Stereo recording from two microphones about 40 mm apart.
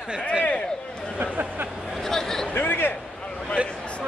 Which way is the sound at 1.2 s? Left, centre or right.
Right.